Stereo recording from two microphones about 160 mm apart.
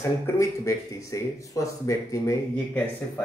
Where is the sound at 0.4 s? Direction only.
20° left (ahead or behind).